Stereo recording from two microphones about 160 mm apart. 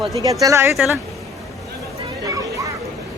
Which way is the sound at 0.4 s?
20° right (ahead or behind).